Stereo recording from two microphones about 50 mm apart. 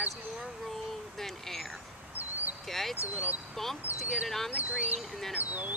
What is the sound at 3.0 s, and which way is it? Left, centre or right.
Speech, right.